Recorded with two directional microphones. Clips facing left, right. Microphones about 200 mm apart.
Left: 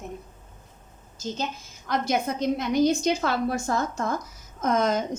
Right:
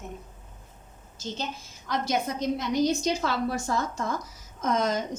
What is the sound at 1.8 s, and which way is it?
A woman's voice, 55° left (ahead or behind).